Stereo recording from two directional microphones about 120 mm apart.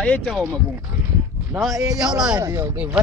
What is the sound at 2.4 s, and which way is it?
Speech, 30° right (ahead or behind).